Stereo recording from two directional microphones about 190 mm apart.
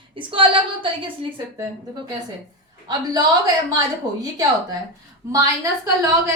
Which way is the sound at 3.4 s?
20° right (ahead or behind).